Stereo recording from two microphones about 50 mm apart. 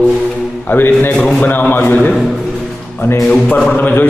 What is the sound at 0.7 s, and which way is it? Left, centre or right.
A man's voice, left.